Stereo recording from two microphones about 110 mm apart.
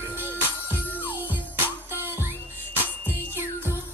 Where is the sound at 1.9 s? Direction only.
20° right (ahead or behind).